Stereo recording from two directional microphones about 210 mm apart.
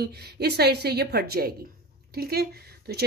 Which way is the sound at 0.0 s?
50° right (ahead or behind).